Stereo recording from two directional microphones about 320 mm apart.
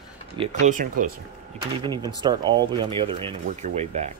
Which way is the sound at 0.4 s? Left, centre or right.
Right.